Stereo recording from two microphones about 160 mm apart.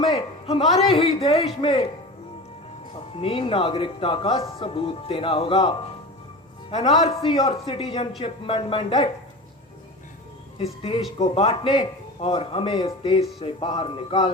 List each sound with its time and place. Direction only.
0.0 s a sound: 35° left (ahead or behind)
0.9 s speech: 40° left (ahead or behind)
3.2 s a man's voice: 35° left (ahead or behind)
10.6 s speech: 35° left (ahead or behind)